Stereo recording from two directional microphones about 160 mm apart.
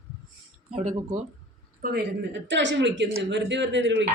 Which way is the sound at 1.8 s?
85° right.